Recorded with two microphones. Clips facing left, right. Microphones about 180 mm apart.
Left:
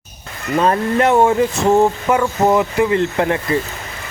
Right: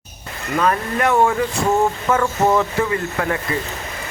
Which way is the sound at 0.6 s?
25° left (ahead or behind).